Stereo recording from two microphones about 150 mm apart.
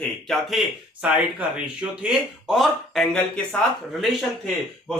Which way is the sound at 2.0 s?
5° right (ahead or behind).